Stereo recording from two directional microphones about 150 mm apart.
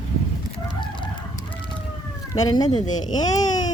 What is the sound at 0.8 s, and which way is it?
Chicken, 30° left (ahead or behind).